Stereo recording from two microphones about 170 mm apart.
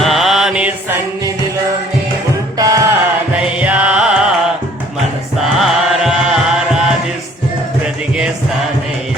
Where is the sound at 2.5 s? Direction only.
20° right (ahead or behind).